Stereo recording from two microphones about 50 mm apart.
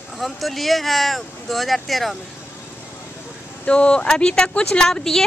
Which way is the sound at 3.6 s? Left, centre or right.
Left.